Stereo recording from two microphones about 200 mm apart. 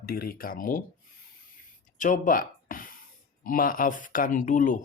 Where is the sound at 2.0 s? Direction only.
40° left (ahead or behind).